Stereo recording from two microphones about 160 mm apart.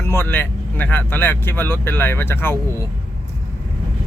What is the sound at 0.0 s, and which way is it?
Speech, 15° left (ahead or behind).